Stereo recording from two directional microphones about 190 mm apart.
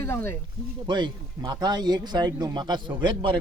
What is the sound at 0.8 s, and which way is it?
Speech, 25° right (ahead or behind).